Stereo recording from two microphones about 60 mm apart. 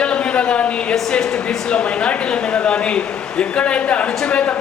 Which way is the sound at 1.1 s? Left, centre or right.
Centre.